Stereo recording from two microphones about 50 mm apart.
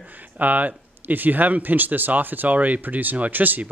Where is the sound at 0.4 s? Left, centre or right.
Right.